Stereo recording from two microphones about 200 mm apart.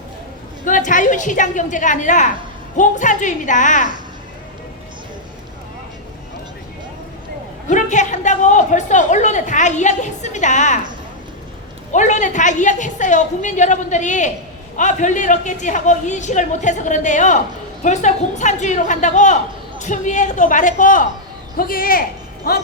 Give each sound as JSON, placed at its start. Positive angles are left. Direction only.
{"t": 0.6, "sound": "a woman's voice", "side_deg": 40}
{"t": 7.7, "sound": "a woman's voice", "side_deg": 35}
{"t": 11.9, "sound": "a woman's voice", "side_deg": 35}